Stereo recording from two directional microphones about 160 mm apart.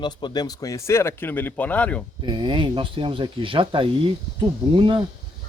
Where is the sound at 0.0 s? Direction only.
30° left (ahead or behind); by 2.0 s 10° left (ahead or behind).